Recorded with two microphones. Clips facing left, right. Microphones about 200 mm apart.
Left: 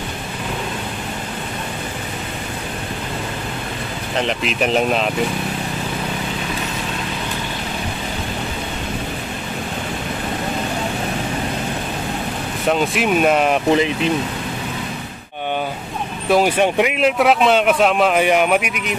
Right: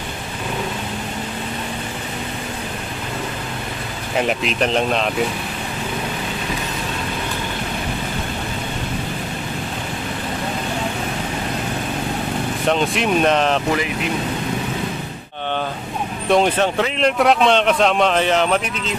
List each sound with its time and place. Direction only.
4.2 s speech: centre (ahead or behind)
12.6 s a man's voice: 5° left (ahead or behind)
13.7 s speech: 20° left (ahead or behind)
16.3 s a man's voice: 5° left (ahead or behind)